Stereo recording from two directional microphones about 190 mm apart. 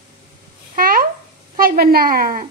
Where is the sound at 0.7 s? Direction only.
50° right (ahead or behind).